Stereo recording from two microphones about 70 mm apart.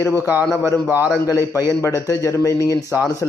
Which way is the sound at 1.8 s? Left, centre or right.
Left.